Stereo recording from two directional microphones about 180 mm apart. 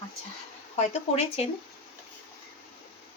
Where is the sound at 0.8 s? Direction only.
35° left (ahead or behind).